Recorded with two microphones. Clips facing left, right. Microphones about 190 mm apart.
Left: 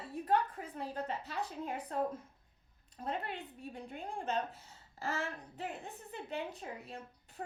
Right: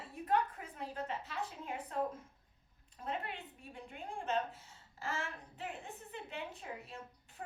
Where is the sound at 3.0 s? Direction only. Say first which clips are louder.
Left 2 dB; 35° left (ahead or behind).